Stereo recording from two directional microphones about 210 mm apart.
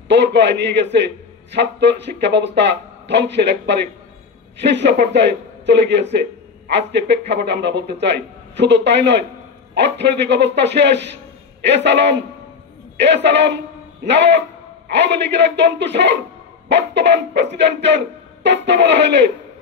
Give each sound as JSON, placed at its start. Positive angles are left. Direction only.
{"t": 0.1, "sound": "speech", "side_deg": -55}